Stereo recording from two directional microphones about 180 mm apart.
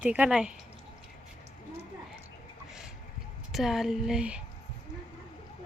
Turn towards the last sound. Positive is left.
turn(degrees=-5)  # may be behind; listen again after turning